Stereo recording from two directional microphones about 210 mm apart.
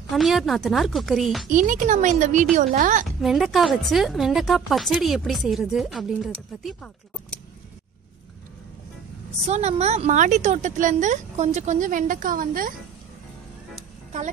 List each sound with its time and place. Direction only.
0.1 s speech: centre (ahead or behind)
1.5 s speech: 40° right (ahead or behind)
3.2 s speech: centre (ahead or behind)
9.5 s speech: 30° right (ahead or behind)